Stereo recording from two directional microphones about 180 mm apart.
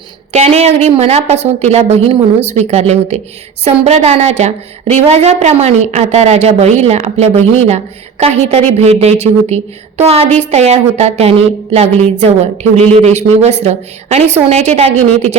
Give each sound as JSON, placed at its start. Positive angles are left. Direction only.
{"t": 0.3, "sound": "a woman's voice", "side_deg": -35}